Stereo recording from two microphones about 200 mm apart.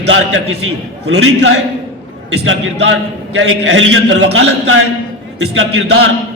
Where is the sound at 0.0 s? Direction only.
75° right (ahead or behind).